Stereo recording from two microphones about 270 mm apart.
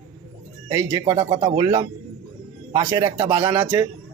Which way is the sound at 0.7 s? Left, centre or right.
Centre.